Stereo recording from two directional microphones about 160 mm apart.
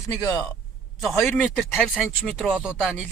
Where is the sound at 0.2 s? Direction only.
25° left (ahead or behind).